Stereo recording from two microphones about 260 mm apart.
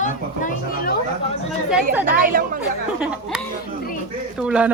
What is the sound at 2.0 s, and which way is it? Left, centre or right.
Speech, right.